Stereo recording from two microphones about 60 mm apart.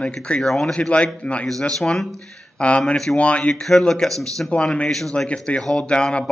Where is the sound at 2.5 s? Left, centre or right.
Centre.